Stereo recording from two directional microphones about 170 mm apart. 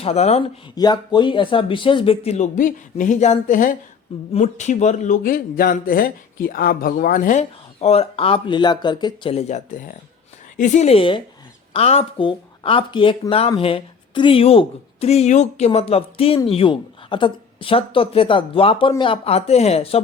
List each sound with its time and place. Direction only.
0.0 s a woman's voice: 40° left (ahead or behind)
0.8 s a woman's voice: 25° left (ahead or behind)